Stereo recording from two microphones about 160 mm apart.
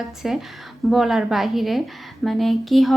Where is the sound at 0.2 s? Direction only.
5° right (ahead or behind).